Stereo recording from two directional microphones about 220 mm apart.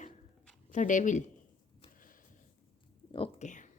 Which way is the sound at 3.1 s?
30° left (ahead or behind).